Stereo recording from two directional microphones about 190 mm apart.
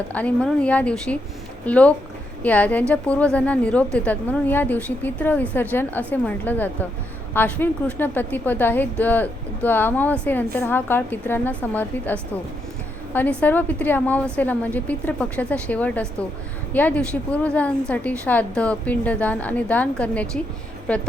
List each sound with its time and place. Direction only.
0.1 s a woman's voice: 5° left (ahead or behind)
13.4 s a woman's voice: 10° left (ahead or behind)